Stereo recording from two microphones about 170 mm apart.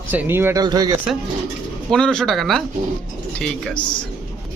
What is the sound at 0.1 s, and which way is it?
Speech, 10° right (ahead or behind).